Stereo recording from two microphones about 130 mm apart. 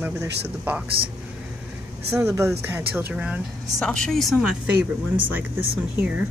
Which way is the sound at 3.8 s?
5° left (ahead or behind).